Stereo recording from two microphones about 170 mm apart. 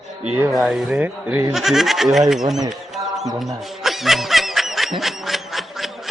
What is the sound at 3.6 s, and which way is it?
Snicker, centre (ahead or behind).